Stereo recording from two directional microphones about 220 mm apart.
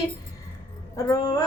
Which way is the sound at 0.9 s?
15° left (ahead or behind).